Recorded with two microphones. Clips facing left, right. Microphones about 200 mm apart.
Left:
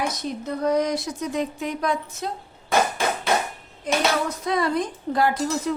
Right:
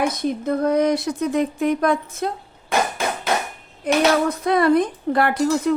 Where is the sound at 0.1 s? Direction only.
55° right (ahead or behind).